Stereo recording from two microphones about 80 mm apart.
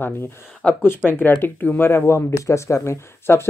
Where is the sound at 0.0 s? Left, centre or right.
Left.